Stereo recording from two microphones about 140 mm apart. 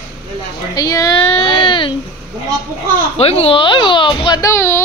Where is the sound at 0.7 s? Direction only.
25° left (ahead or behind).